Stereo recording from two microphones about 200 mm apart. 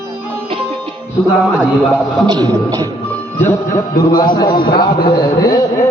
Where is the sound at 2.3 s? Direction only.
20° right (ahead or behind).